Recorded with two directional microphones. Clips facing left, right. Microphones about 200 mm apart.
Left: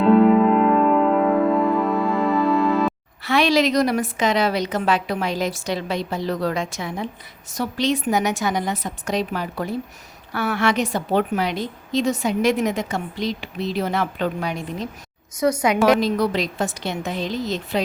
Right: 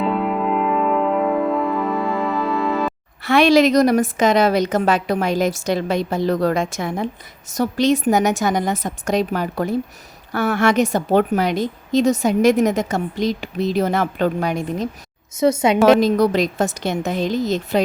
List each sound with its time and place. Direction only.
0.0 s music: centre (ahead or behind)
3.2 s a woman's voice: 50° right (ahead or behind)
15.4 s a woman's voice: 25° right (ahead or behind)
16.0 s a woman's voice: 45° right (ahead or behind)